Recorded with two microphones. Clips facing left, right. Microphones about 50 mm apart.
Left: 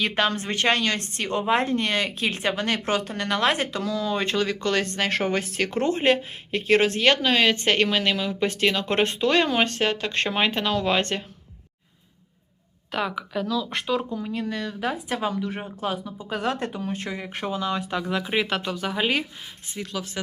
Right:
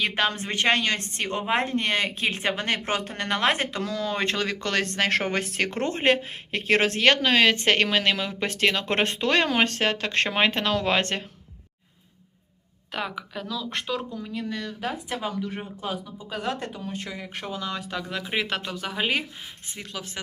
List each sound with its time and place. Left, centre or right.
0.0 s a woman's voice: centre; by 3.9 s right
3.9 s speech: right
12.9 s speech: centre
14.5 s speech: left
16.8 s speech: left
17.2 s speech: left
18.2 s speech: centre
19.7 s a woman's voice: right